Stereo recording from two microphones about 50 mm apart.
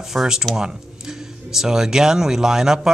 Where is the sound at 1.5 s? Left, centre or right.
Centre.